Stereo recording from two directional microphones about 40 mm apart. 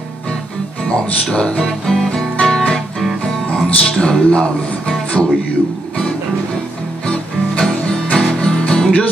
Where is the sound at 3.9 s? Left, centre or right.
Left.